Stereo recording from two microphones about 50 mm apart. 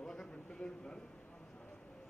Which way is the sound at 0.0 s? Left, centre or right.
Centre.